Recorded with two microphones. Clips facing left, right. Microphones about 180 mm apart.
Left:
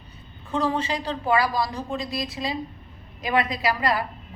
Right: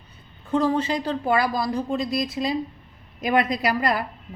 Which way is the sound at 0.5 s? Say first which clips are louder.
Right 3 dB; 45° right (ahead or behind).